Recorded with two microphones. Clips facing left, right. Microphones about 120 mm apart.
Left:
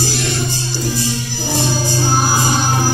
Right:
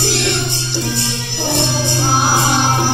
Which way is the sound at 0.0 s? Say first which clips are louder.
Right 2 dB; 70° right (ahead or behind).